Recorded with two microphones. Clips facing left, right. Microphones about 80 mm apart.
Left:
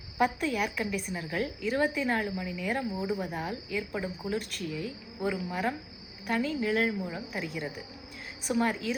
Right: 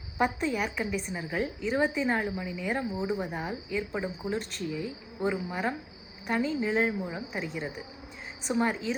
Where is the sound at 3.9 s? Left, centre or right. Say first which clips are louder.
Right 1 dB; right.